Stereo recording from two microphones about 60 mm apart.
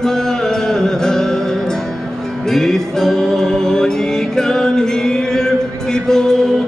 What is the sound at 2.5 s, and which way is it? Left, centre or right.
Music, centre.